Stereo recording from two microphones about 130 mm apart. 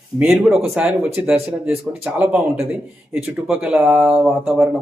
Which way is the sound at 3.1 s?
5° right (ahead or behind).